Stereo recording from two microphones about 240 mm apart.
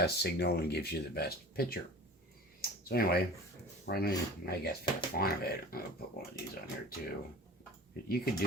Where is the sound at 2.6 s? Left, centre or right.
Left.